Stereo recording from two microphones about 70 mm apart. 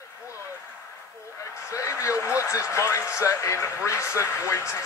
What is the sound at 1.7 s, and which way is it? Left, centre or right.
Speech, left.